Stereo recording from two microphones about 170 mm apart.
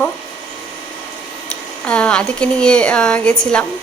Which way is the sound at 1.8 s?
5° left (ahead or behind).